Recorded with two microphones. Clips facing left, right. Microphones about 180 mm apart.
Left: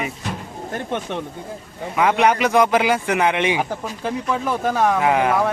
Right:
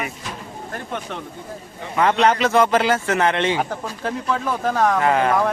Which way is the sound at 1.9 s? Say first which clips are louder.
Even; 10° left (ahead or behind).